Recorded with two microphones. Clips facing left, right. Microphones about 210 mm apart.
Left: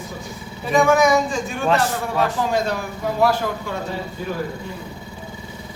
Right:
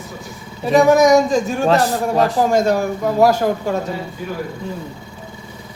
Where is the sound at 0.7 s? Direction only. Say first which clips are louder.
Right 5 dB; 40° right (ahead or behind).